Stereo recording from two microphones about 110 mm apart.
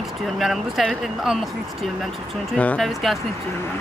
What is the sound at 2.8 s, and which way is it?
Speech, centre (ahead or behind).